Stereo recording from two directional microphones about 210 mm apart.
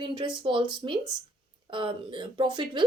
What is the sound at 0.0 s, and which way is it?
A woman's voice, 25° right (ahead or behind).